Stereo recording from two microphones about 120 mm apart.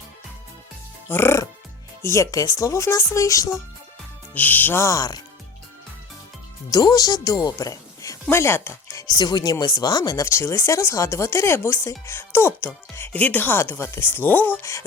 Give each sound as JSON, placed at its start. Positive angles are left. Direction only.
{"t": 1.1, "sound": "a woman's voice", "side_deg": 20}
{"t": 4.4, "sound": "a woman's voice", "side_deg": 15}
{"t": 6.7, "sound": "a woman's voice", "side_deg": 35}